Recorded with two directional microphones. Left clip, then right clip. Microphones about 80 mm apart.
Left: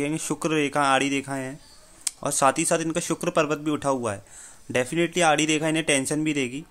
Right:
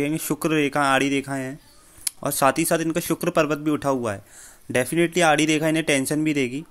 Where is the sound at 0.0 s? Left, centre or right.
Right.